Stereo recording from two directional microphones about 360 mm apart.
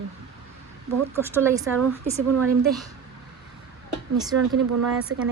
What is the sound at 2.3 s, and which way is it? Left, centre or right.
Speech, right.